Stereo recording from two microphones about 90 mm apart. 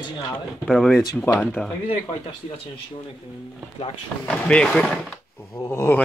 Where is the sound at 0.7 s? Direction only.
5° left (ahead or behind).